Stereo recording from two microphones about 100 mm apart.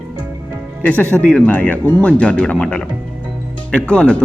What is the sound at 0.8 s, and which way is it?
Speech, 15° left (ahead or behind).